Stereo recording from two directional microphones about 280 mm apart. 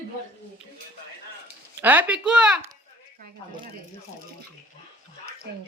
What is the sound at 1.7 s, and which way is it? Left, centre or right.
Speech, centre.